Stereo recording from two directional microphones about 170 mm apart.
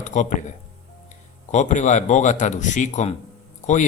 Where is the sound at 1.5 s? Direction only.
45° left (ahead or behind).